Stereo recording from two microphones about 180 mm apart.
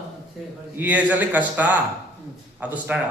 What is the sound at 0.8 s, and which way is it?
A man's voice, 10° right (ahead or behind).